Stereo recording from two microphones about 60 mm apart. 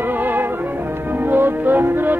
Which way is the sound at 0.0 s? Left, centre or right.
Right.